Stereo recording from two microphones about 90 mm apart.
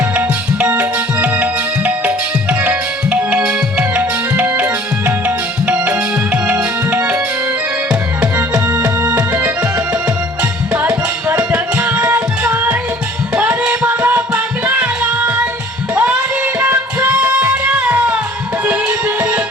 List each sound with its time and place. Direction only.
0.2 s music: 20° right (ahead or behind)
9.1 s music: 20° right (ahead or behind)
10.8 s music: 20° right (ahead or behind)